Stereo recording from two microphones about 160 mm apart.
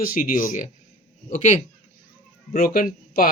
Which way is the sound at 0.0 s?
60° left (ahead or behind).